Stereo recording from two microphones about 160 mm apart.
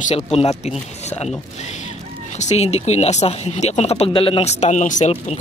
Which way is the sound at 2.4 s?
45° left (ahead or behind).